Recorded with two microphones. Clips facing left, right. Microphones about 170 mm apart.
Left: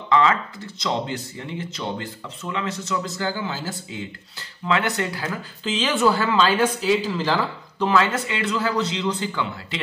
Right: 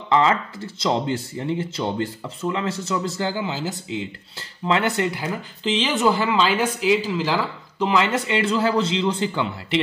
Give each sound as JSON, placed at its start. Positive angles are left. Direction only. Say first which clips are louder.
{"t": 0.1, "sound": "speech", "louder": "right 1 dB", "side_deg": -30}